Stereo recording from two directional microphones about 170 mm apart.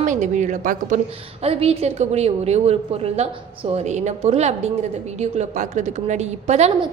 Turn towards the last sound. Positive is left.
turn(degrees=-40)  # may be behind; listen again after turning